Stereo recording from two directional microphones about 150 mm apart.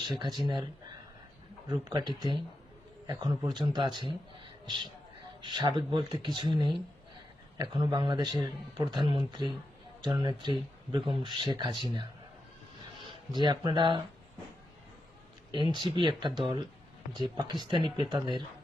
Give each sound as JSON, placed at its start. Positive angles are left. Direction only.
{"t": 0.0, "sound": "speech", "side_deg": -30}
{"t": 1.7, "sound": "a man's voice", "side_deg": -25}
{"t": 13.0, "sound": "speech", "side_deg": -30}
{"t": 15.7, "sound": "a man's voice", "side_deg": -30}